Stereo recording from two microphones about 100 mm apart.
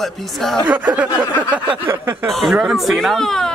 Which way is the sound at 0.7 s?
15° right (ahead or behind).